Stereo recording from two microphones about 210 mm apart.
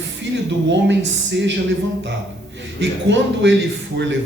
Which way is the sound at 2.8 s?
60° right (ahead or behind).